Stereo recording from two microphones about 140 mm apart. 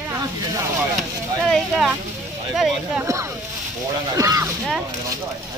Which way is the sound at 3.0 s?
20° right (ahead or behind).